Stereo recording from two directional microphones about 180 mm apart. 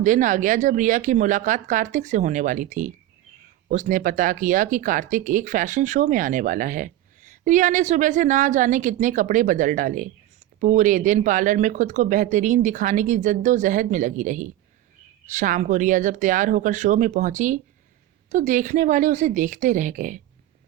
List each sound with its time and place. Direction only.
0.0 s speech: 45° right (ahead or behind)